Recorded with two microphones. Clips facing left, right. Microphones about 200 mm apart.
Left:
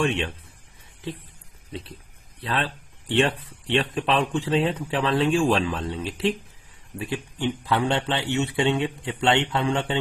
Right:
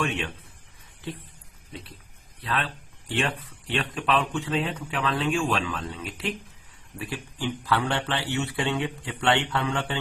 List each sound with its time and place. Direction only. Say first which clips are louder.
0.0 s speech: left 4 dB; 25° left (ahead or behind)
2.4 s speech: left 2 dB; 30° left (ahead or behind)